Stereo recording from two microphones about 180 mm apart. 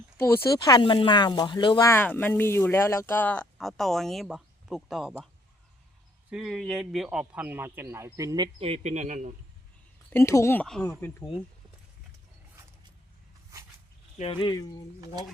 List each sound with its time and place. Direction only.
0.5 s speech: 20° left (ahead or behind)
1.9 s speech: 10° left (ahead or behind)
6.3 s speech: centre (ahead or behind); by 8.4 s 20° right (ahead or behind)
8.5 s speech: 35° right (ahead or behind)
10.1 s speech: 15° left (ahead or behind)
10.8 s speech: 20° left (ahead or behind)
14.2 s speech: 30° left (ahead or behind)